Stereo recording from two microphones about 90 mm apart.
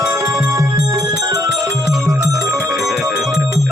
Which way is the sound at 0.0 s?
35° right (ahead or behind).